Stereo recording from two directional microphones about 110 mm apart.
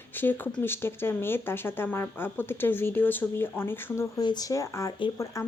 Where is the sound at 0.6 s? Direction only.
20° left (ahead or behind).